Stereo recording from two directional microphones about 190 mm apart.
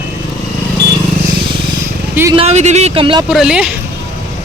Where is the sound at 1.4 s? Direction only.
25° right (ahead or behind).